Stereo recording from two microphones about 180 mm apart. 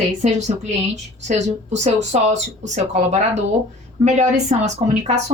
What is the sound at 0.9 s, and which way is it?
Speech, 40° right (ahead or behind).